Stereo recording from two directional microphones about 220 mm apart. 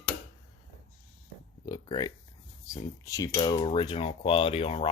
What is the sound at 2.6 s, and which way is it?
Speech, 15° left (ahead or behind).